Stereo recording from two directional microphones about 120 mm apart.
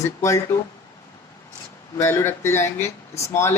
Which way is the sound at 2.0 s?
20° left (ahead or behind).